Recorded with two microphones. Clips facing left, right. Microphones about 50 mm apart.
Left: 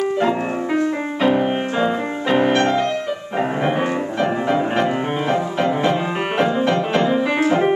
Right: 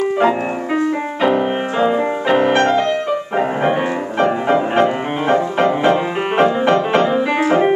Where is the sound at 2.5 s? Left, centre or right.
Right.